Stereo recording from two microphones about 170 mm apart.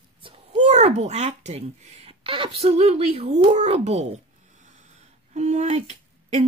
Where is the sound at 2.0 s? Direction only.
30° right (ahead or behind).